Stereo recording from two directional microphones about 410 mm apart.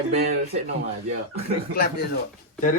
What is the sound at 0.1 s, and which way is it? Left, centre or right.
Speech, centre.